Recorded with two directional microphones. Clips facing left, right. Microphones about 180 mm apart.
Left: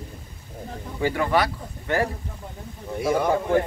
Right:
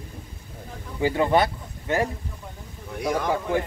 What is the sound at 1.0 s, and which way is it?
Speech, 25° right (ahead or behind).